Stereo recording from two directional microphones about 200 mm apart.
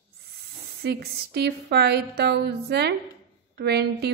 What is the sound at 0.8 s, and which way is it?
A woman's voice, 55° right (ahead or behind).